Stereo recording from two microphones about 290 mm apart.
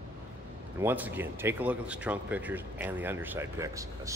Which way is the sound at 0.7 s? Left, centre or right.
Centre.